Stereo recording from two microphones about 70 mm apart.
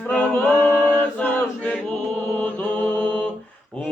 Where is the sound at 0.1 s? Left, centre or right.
Left.